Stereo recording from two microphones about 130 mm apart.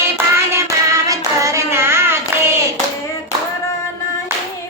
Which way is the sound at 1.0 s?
25° right (ahead or behind).